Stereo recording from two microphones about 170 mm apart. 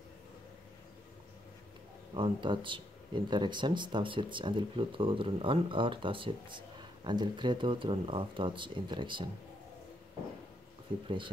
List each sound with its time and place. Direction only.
2.1 s speech: 30° right (ahead or behind)
11.1 s speech: 30° right (ahead or behind)